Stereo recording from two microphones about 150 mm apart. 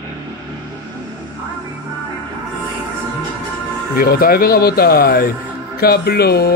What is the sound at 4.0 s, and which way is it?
Speech, 75° left (ahead or behind).